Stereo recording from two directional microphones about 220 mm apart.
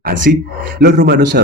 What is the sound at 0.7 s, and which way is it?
Speech, 50° right (ahead or behind).